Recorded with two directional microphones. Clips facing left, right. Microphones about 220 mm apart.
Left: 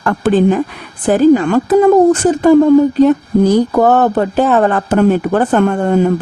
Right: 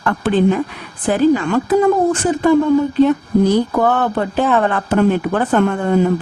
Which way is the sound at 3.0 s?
45° left (ahead or behind).